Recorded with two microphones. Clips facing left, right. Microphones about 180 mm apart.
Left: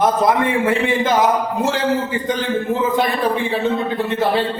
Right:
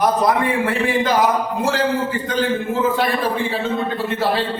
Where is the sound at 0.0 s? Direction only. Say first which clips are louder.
Left 1 dB; 25° left (ahead or behind).